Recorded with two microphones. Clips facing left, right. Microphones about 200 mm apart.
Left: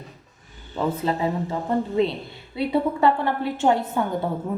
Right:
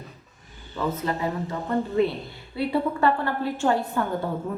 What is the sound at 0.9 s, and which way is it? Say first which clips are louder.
A woman's voice: left 3 dB; 25° left (ahead or behind).